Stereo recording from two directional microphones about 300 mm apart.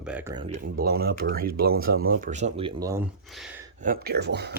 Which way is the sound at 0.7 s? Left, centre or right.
Right.